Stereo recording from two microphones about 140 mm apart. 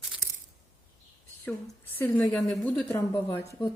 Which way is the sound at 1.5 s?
15° left (ahead or behind).